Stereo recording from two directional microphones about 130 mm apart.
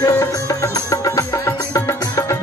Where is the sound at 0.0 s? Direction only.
25° left (ahead or behind).